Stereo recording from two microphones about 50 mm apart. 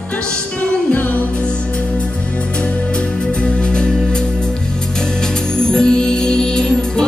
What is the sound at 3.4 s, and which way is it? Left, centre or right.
Music, centre.